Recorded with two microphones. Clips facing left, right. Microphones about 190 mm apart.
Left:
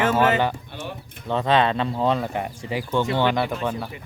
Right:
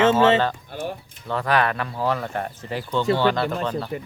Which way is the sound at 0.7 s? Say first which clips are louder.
Right 4 dB; 45° right (ahead or behind).